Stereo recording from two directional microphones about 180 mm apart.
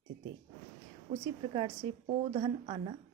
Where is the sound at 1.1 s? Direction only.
40° right (ahead or behind).